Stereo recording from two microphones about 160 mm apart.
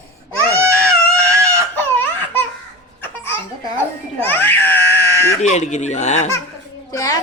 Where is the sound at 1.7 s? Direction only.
10° left (ahead or behind).